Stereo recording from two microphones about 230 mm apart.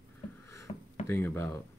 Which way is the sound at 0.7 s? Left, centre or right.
Left.